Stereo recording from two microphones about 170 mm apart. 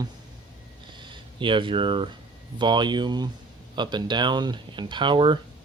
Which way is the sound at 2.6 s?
25° right (ahead or behind).